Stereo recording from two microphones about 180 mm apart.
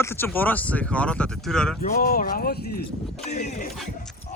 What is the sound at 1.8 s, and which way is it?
Speech, 50° left (ahead or behind).